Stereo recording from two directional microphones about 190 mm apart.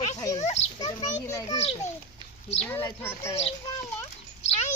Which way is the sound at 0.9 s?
25° left (ahead or behind).